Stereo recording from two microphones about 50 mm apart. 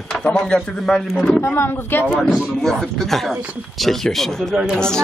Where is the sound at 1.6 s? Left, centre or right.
Left.